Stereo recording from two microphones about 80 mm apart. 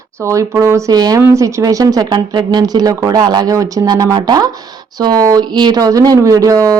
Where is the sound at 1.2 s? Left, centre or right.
Right.